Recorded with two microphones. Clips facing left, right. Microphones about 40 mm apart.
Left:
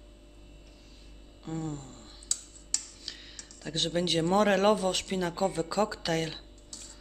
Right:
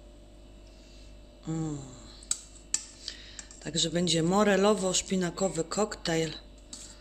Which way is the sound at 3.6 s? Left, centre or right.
Centre.